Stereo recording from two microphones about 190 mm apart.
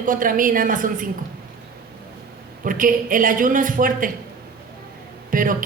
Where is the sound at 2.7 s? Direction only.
45° right (ahead or behind).